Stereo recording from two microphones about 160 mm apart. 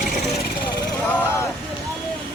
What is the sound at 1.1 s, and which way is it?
Speech, 15° left (ahead or behind).